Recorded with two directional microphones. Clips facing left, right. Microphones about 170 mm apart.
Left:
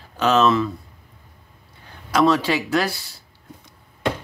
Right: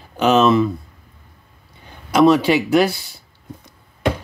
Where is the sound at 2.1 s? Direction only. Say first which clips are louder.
Right 5 dB; 20° right (ahead or behind).